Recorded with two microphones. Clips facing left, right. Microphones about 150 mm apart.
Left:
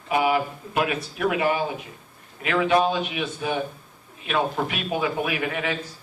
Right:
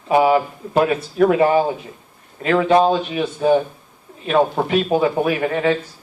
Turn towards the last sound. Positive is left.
turn(degrees=-35)  # may be behind; listen again after turning